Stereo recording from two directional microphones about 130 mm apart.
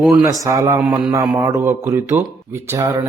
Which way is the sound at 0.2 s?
25° right (ahead or behind).